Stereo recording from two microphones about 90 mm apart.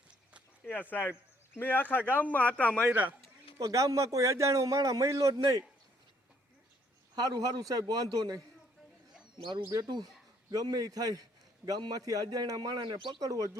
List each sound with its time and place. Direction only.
0.6 s speech: 20° left (ahead or behind)
2.0 s speech: 20° right (ahead or behind)
2.2 s a man's voice: 15° left (ahead or behind)
2.9 s speech: 20° right (ahead or behind)
3.6 s a man's voice: 40° right (ahead or behind)
7.2 s a man's voice: 45° right (ahead or behind)
9.6 s a man's voice: 40° right (ahead or behind); by 13.1 s 60° right (ahead or behind)
13.1 s a man's voice: 40° right (ahead or behind)